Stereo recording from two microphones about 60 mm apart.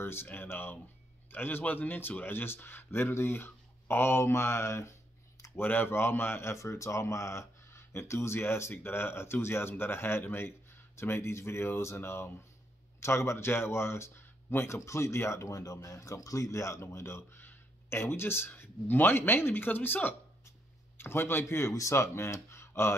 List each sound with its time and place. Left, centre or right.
0.0 s a man's voice: left
5.6 s speech: left
17.4 s a sound: left
18.5 s speech: left